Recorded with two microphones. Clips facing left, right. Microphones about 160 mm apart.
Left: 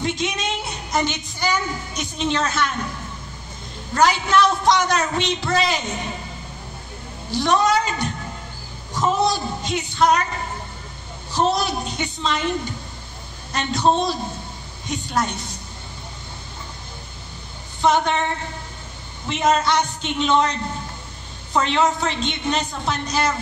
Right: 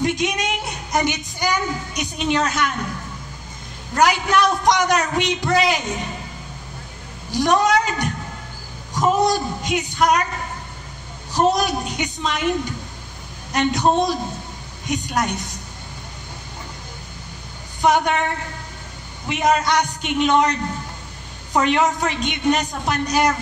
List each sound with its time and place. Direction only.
0.0 s speech: 15° right (ahead or behind)
3.9 s a man's voice: 15° right (ahead or behind)
7.2 s a man's voice: 15° right (ahead or behind)
11.3 s a man's voice: 15° right (ahead or behind)
17.8 s a man's voice: 15° right (ahead or behind)
19.2 s a man's voice: 15° right (ahead or behind)
21.5 s a man's voice: 10° right (ahead or behind)